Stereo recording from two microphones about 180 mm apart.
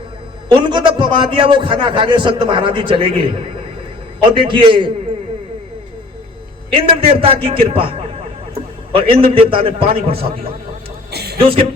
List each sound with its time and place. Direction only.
0.4 s a man's voice: 25° right (ahead or behind)
6.7 s a man's voice: 30° right (ahead or behind)
11.1 s a sound: 60° right (ahead or behind)
11.3 s speech: 30° right (ahead or behind)